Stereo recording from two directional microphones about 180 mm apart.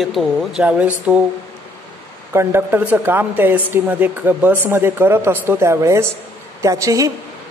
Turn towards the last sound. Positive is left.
turn(degrees=-20)  # may be behind; listen again after turning